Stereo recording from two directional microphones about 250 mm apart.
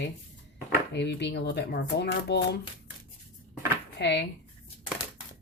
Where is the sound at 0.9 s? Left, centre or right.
Left.